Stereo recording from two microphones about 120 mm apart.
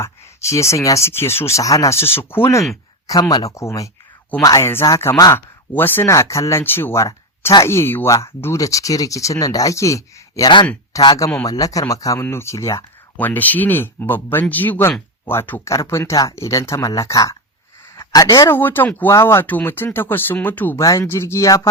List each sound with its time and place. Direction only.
0.0 s speech: 25° left (ahead or behind)
3.1 s speech: 30° left (ahead or behind)
13.1 s speech: 15° left (ahead or behind)
20.8 s speech: 25° left (ahead or behind)